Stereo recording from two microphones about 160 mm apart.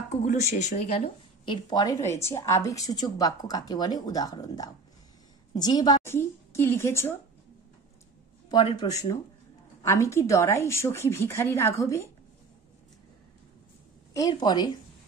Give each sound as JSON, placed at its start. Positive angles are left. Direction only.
{"t": 0.3, "sound": "a woman's voice", "side_deg": 50}
{"t": 6.1, "sound": "a woman's voice", "side_deg": 15}
{"t": 8.5, "sound": "a woman's voice", "side_deg": 25}
{"t": 14.1, "sound": "speech", "side_deg": 25}